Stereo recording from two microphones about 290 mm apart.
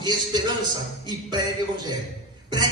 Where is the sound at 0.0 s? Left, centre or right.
Centre.